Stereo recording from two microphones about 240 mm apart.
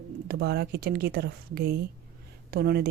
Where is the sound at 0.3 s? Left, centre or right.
Right.